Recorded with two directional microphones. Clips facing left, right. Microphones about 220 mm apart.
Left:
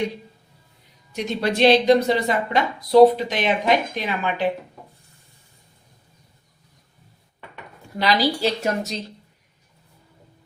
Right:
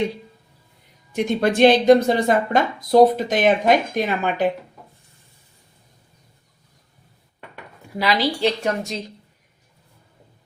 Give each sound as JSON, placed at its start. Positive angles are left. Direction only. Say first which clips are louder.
{"t": 1.1, "sound": "a woman's voice", "louder": "right 4 dB", "side_deg": -50}
{"t": 7.9, "sound": "a woman's voice", "louder": "even", "side_deg": 0}